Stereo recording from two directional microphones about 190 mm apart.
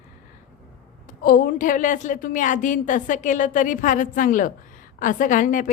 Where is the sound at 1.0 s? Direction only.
45° left (ahead or behind).